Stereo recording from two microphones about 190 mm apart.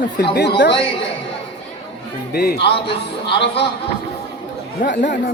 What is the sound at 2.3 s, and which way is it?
Speech, 55° left (ahead or behind).